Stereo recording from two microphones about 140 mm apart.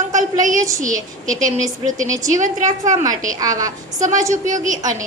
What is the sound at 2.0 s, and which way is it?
Speech, 25° right (ahead or behind).